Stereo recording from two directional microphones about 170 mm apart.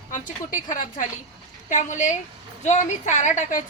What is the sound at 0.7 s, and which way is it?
A woman's voice, 50° left (ahead or behind).